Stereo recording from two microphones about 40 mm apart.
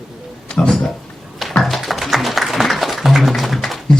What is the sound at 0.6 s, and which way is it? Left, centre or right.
Speech, left.